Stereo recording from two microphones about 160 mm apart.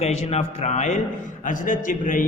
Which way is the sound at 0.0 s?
40° left (ahead or behind).